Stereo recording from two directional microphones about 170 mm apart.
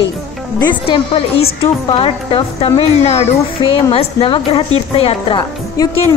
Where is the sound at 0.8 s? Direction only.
30° left (ahead or behind).